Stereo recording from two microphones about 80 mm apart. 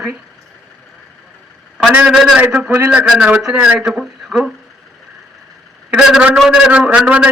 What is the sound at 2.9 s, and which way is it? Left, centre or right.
A man's voice, centre.